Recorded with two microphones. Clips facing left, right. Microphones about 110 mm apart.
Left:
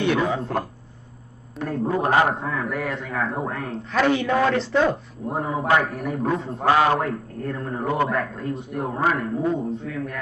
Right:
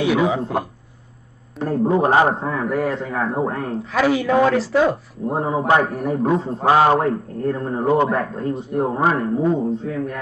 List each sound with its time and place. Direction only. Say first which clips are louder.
0.0 s speech: right 4 dB; 5° right (ahead or behind)
1.6 s a man's voice: right 6 dB; 30° right (ahead or behind)
3.9 s speech: right 3 dB; 5° right (ahead or behind)
5.3 s a man's voice: right 3 dB; 30° right (ahead or behind)
9.8 s a man's voice: right 5 dB; 40° right (ahead or behind)